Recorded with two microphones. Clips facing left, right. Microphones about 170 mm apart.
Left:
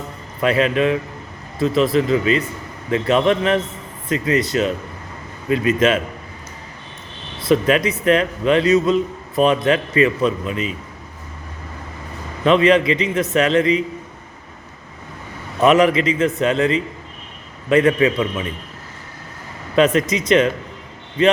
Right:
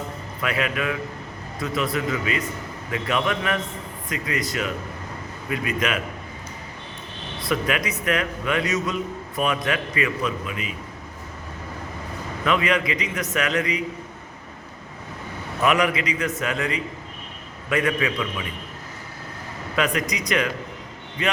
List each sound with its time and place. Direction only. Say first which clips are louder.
0.4 s a man's voice: left 9 dB; 30° left (ahead or behind)
7.5 s a man's voice: left 9 dB; 25° left (ahead or behind)
12.5 s a man's voice: left 9 dB; 25° left (ahead or behind)
15.6 s a man's voice: left 8 dB; 25° left (ahead or behind)
17.7 s a man's voice: left 9 dB; 35° left (ahead or behind)
19.7 s a man's voice: left 9 dB; 25° left (ahead or behind)